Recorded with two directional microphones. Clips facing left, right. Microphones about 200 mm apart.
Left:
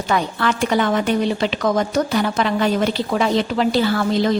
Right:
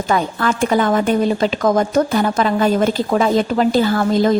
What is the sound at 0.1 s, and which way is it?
A woman's voice, 45° right (ahead or behind).